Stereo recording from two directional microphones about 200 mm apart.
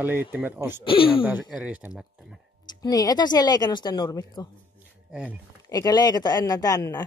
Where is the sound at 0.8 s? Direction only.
25° left (ahead or behind).